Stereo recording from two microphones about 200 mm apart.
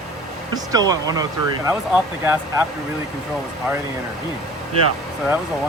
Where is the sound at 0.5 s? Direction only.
20° right (ahead or behind).